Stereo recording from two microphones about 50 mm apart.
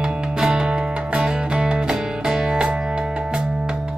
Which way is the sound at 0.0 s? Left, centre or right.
Centre.